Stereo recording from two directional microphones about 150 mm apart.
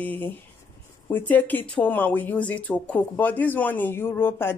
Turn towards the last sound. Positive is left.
turn(degrees=15)  # may be behind; listen again after turning